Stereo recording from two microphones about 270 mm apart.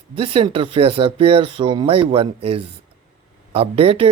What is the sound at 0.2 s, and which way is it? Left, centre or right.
Speech, centre.